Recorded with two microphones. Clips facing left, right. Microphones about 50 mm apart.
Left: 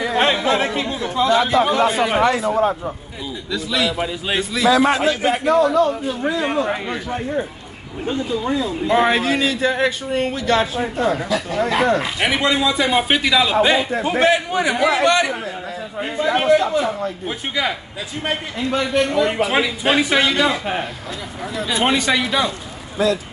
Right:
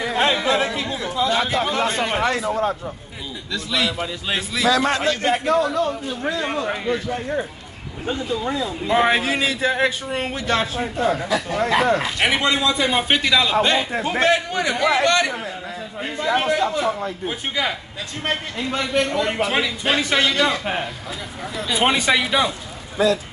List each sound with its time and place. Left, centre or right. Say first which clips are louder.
0.5 s chatter: left 2 dB; left
1.4 s a man's voice: left 5 dB; centre
4.6 s a man's voice: left 4 dB; centre
18.2 s a man's voice: left 1 dB; centre